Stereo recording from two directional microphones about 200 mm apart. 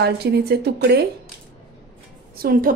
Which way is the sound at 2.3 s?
45° right (ahead or behind).